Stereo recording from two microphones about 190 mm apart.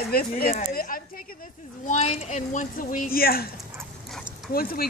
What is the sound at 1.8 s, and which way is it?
Speech, 35° left (ahead or behind).